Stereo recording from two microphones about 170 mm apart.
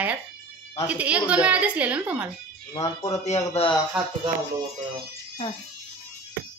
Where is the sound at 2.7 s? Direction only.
20° left (ahead or behind).